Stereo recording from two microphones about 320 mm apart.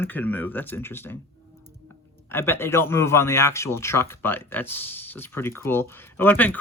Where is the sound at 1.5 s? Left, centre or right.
Right.